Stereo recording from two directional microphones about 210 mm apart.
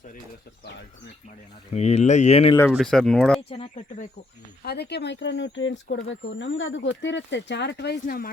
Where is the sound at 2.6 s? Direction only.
5° left (ahead or behind).